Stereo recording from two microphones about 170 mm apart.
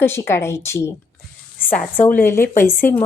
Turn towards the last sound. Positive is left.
turn(degrees=15)  # may be behind; listen again after turning